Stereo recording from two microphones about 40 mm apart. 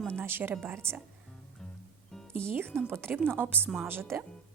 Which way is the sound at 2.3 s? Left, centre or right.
Right.